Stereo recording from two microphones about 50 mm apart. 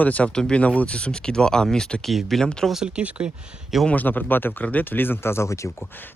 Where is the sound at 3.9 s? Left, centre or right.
Left.